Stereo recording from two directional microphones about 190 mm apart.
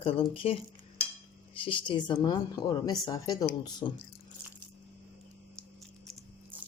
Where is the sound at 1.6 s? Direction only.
25° left (ahead or behind).